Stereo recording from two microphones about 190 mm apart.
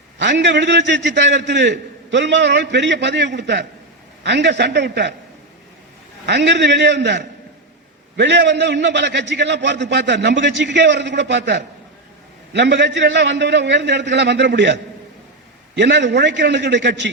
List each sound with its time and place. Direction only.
0.2 s a man's voice: 65° right (ahead or behind)
6.2 s a man's voice: 65° right (ahead or behind)